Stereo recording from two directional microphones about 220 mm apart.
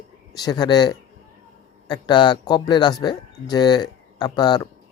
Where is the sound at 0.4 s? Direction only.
20° left (ahead or behind).